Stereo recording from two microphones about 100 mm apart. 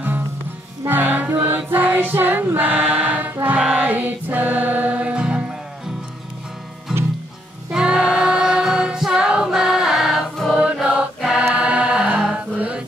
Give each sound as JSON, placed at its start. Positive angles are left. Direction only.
{"t": 0.8, "sound": "music", "side_deg": -15}
{"t": 2.7, "sound": "choir", "side_deg": -5}
{"t": 3.8, "sound": "music", "side_deg": -15}
{"t": 6.9, "sound": "music", "side_deg": -5}
{"t": 7.7, "sound": "choir", "side_deg": -5}
{"t": 10.5, "sound": "music", "side_deg": -10}